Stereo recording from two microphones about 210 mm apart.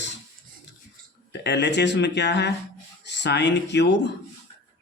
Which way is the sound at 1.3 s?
55° left (ahead or behind).